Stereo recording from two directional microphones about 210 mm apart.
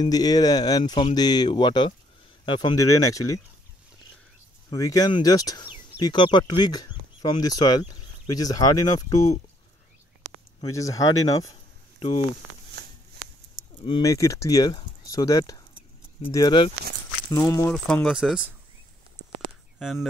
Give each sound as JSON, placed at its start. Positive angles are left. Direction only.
{"t": 0.0, "sound": "speech", "side_deg": 20}
{"t": 4.6, "sound": "speech", "side_deg": 15}
{"t": 10.6, "sound": "speech", "side_deg": 15}
{"t": 13.8, "sound": "speech", "side_deg": 20}
{"t": 17.8, "sound": "speech", "side_deg": 0}
{"t": 19.8, "sound": "speech", "side_deg": 0}